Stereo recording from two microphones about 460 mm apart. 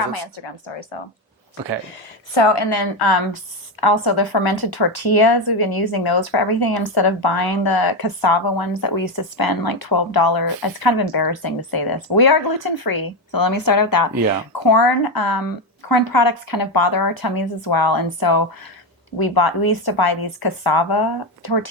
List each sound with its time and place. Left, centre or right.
2.3 s a woman's voice: left